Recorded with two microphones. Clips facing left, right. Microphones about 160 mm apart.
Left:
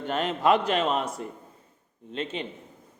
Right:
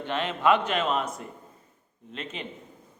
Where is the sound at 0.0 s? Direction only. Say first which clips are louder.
Left 1 dB; 40° left (ahead or behind).